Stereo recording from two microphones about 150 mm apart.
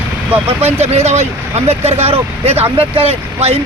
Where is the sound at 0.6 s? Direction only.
45° right (ahead or behind).